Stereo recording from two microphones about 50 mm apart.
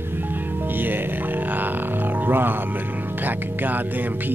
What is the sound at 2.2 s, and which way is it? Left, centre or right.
Music, right.